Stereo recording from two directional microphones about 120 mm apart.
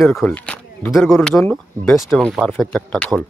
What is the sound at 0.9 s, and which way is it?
Speech, 5° right (ahead or behind).